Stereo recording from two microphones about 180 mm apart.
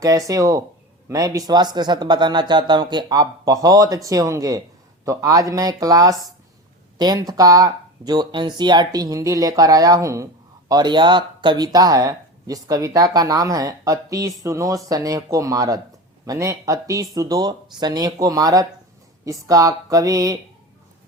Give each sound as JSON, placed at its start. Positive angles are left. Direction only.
{"t": 0.0, "sound": "speech", "side_deg": -20}